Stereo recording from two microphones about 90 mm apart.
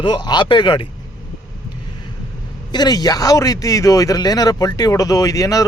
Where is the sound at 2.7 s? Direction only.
50° left (ahead or behind).